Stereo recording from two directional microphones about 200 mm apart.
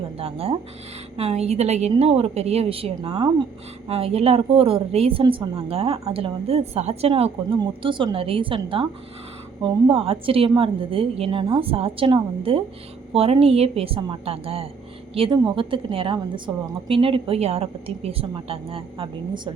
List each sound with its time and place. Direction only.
0.2 s a woman's voice: 30° right (ahead or behind)